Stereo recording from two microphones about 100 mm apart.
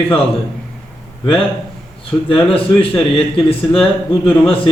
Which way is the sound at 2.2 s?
65° left (ahead or behind).